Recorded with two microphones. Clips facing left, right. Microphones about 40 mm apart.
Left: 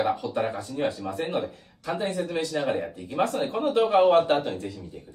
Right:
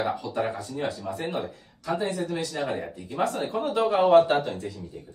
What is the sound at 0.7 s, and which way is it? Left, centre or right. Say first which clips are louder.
Speech: left 2 dB; left.